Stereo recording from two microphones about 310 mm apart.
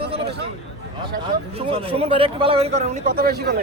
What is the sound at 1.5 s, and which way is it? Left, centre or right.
A man's voice, centre.